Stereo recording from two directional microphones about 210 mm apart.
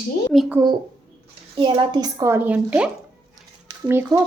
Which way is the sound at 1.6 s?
20° right (ahead or behind).